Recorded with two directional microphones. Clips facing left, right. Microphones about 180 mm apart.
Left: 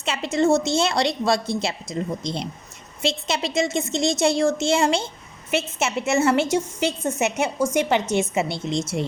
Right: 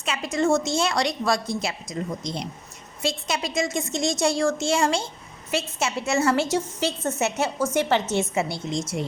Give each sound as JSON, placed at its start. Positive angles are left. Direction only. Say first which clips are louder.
{"t": 0.0, "sound": "a woman's voice", "louder": "left 3 dB", "side_deg": 25}